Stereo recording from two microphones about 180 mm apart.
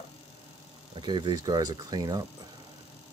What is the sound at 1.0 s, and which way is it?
Speech, 25° right (ahead or behind).